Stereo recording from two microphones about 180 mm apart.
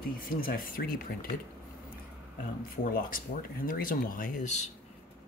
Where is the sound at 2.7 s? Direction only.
50° left (ahead or behind).